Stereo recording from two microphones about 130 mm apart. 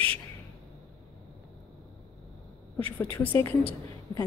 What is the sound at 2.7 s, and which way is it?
Speech, 15° left (ahead or behind).